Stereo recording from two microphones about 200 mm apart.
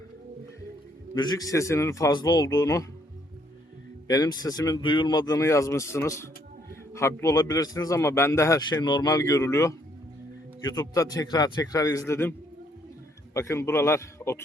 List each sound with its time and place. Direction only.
1.1 s a man's voice: 20° left (ahead or behind)
4.1 s a man's voice: 20° left (ahead or behind)
13.3 s a man's voice: 15° left (ahead or behind)